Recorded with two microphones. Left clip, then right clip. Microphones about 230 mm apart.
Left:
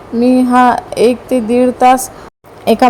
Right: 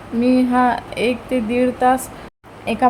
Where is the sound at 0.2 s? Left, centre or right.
Centre.